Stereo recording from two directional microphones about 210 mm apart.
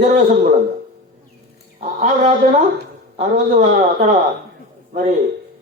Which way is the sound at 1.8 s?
35° right (ahead or behind).